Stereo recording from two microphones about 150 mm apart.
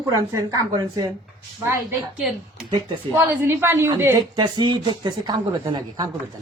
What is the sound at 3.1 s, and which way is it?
A woman's voice, 15° right (ahead or behind).